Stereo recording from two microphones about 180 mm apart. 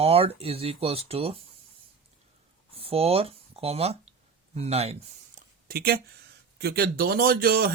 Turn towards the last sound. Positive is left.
turn(degrees=-55)  # may be behind; listen again after turning